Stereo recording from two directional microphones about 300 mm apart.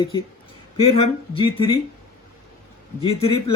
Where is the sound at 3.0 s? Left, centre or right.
Centre.